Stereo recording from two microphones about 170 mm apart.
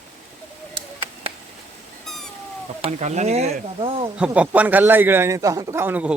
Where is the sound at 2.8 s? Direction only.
40° right (ahead or behind).